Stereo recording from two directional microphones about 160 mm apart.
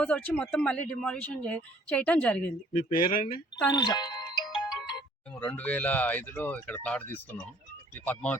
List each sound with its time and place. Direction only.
0.0 s speech: 10° left (ahead or behind)
2.7 s speech: 60° left (ahead or behind)
3.8 s music: 25° left (ahead or behind)
4.8 s music: centre (ahead or behind)
5.5 s speech: 10° left (ahead or behind)